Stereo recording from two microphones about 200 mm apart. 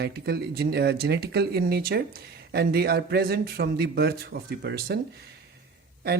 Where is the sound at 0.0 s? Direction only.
50° right (ahead or behind).